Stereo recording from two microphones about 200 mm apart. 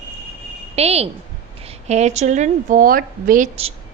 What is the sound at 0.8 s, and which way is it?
A woman's voice, 30° right (ahead or behind).